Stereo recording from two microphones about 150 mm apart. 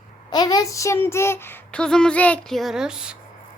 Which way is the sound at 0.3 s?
25° left (ahead or behind).